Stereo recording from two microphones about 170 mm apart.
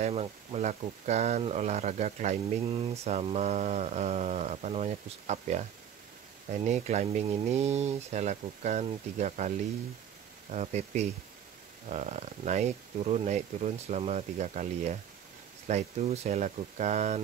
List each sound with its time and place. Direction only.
0.0 s speech: 40° right (ahead or behind)
6.6 s speech: 40° right (ahead or behind)
10.5 s speech: 40° right (ahead or behind)